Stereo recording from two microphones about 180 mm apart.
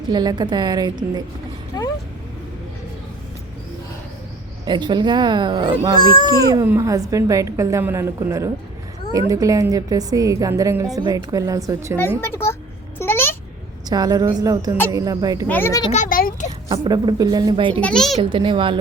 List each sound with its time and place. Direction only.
0.1 s a woman's voice: 25° right (ahead or behind)
1.7 s vehicle: 20° left (ahead or behind)
4.6 s a woman's voice: 25° right (ahead or behind)
6.0 s speech: 25° left (ahead or behind)
6.3 s a woman's voice: 20° right (ahead or behind)
12.2 s a child's voice: 15° left (ahead or behind)
13.0 s a sound: 15° left (ahead or behind)
13.9 s a woman's voice: 20° right (ahead or behind)
15.4 s a child's voice: 10° left (ahead or behind)
15.8 s a child's voice: 35° left (ahead or behind)
16.0 s a child's voice: 50° left (ahead or behind)
16.6 s a woman's voice: 25° right (ahead or behind)
17.7 s a child's voice: 5° left (ahead or behind)
18.2 s a woman's voice: 30° right (ahead or behind)